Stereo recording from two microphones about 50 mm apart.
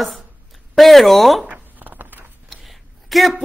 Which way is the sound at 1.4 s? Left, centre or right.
Right.